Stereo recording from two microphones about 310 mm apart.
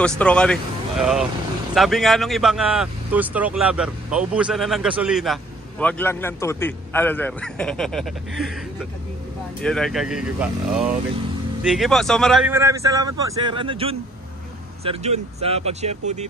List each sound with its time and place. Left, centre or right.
0.2 s a man's voice: centre
9.6 s a man's voice: centre